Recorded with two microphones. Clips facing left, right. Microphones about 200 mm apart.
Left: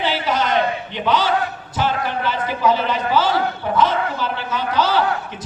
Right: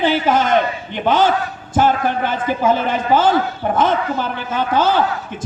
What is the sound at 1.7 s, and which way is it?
A man's voice, 50° right (ahead or behind).